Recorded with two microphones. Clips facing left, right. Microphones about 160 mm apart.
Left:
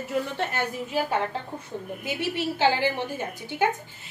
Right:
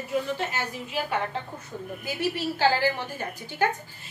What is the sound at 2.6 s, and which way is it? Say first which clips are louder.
A woman's voice: even; 20° left (ahead or behind).